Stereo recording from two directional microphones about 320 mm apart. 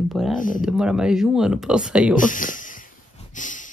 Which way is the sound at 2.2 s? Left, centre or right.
Left.